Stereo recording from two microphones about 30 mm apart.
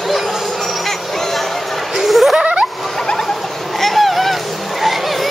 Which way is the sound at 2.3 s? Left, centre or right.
Right.